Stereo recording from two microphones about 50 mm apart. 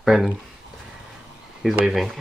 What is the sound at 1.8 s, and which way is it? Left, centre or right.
Speech, centre.